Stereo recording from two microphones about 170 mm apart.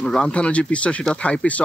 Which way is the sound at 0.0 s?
5° left (ahead or behind).